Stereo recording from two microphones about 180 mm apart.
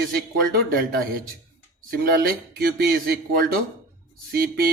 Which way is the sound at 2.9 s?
55° right (ahead or behind).